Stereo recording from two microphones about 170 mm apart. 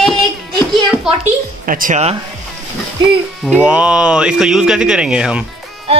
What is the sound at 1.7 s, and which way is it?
Speech, 50° right (ahead or behind).